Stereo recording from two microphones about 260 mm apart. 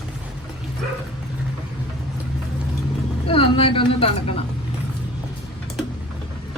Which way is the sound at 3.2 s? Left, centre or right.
Left.